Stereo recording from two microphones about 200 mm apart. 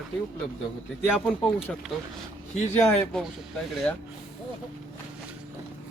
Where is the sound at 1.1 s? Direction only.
Centre (ahead or behind).